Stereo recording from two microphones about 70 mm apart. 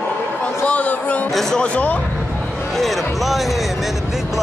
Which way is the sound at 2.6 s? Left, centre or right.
Centre.